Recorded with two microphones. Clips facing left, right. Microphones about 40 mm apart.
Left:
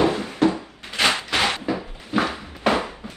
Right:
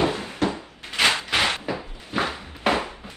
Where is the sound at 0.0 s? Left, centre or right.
Left.